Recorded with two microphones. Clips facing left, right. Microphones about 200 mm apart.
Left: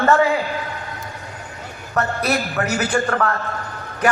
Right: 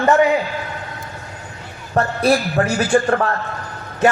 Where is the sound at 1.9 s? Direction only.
30° right (ahead or behind).